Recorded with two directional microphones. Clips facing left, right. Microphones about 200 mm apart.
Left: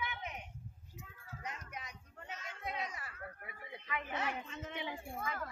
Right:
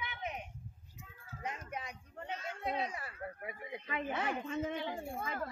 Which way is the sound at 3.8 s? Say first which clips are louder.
Right 4 dB; 30° right (ahead or behind).